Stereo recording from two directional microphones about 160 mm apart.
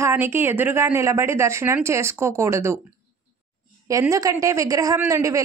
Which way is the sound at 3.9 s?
20° right (ahead or behind).